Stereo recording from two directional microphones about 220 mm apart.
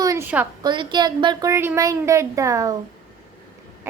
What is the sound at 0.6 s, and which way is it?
A woman's voice, 20° right (ahead or behind).